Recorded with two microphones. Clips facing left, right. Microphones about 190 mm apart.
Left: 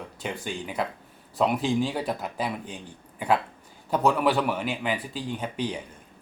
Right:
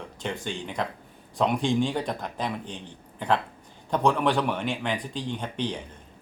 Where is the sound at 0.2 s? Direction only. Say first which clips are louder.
Right 1 dB; 10° left (ahead or behind).